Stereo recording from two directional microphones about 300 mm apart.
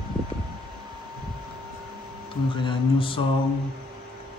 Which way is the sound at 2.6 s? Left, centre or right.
Centre.